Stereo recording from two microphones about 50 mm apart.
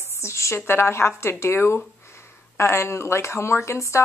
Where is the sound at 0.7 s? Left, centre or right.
Left.